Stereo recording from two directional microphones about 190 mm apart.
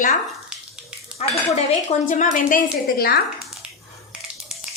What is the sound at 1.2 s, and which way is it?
A woman's voice, 35° left (ahead or behind).